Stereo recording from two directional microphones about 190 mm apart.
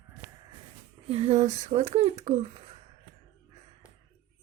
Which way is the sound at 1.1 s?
35° right (ahead or behind).